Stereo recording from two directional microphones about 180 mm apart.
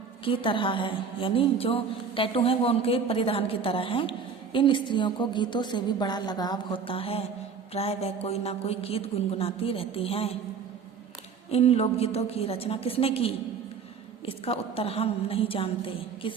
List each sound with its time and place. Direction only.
0.3 s a woman's voice: 30° left (ahead or behind)
11.5 s a woman's voice: 35° left (ahead or behind)